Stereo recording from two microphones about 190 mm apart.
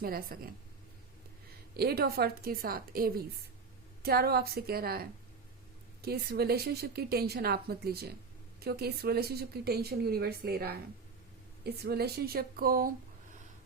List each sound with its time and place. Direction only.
0.0 s a woman's voice: 50° right (ahead or behind)
1.7 s a woman's voice: 55° right (ahead or behind)